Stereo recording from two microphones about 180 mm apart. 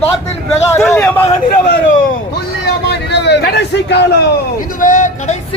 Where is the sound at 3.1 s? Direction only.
70° left (ahead or behind).